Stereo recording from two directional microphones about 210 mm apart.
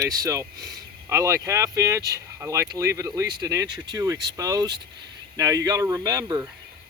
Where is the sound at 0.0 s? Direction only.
15° right (ahead or behind).